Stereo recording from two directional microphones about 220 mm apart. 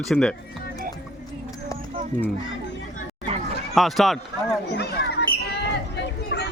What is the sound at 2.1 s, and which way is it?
Speech, 35° right (ahead or behind).